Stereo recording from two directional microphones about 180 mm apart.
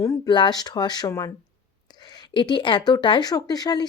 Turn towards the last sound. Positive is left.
turn(degrees=20)  # may be behind; listen again after turning